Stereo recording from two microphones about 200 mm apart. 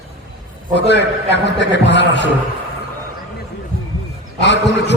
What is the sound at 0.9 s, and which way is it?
A man's voice, 60° left (ahead or behind).